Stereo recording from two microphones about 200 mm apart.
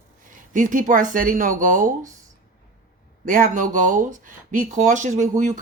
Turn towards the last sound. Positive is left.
turn(degrees=-35)  # may be behind; listen again after turning